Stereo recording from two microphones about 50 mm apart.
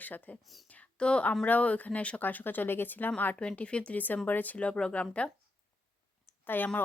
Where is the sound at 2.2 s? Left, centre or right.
Left.